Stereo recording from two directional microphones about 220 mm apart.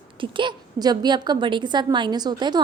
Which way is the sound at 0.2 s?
20° right (ahead or behind).